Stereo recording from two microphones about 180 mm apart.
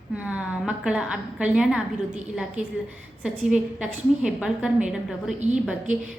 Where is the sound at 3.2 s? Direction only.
5° right (ahead or behind).